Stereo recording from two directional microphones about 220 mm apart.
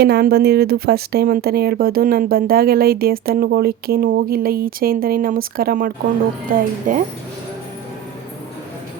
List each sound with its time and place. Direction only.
0.0 s speech: 45° right (ahead or behind)